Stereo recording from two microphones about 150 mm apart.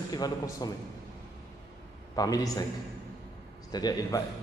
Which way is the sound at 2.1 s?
25° left (ahead or behind).